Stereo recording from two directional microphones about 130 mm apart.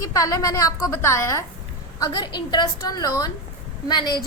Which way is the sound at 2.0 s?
30° left (ahead or behind).